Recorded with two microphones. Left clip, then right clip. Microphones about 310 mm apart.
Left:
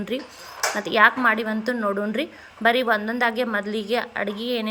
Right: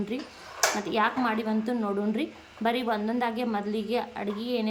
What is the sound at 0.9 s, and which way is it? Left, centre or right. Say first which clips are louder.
Speech: left 13 dB; centre.